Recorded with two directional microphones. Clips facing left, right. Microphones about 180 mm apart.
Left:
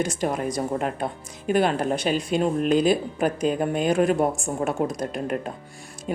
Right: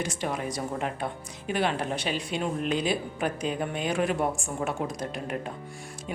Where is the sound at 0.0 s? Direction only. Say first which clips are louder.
Left 6 dB; 45° left (ahead or behind).